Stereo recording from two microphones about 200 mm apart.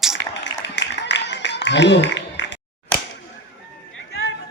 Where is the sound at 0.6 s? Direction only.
60° left (ahead or behind).